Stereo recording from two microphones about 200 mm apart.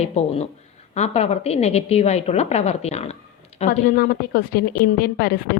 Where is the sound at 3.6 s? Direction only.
45° left (ahead or behind).